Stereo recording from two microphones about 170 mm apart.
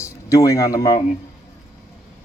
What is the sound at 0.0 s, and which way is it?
Speech, 20° left (ahead or behind).